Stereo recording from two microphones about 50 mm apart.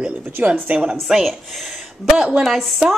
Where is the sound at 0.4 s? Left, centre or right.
Right.